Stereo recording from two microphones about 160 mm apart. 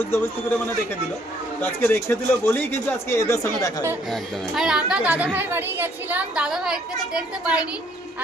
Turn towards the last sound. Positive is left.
turn(degrees=-5)  # may be behind; listen again after turning